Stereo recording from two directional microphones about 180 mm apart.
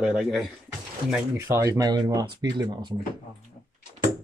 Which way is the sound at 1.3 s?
15° right (ahead or behind).